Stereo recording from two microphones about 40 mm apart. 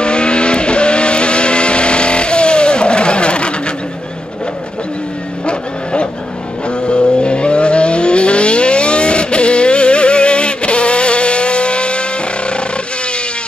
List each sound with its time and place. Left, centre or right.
0.0 s vehicle: left
6.8 s vehicle: left